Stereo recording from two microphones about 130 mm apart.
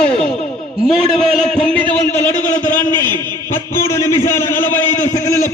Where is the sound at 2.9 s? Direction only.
30° right (ahead or behind).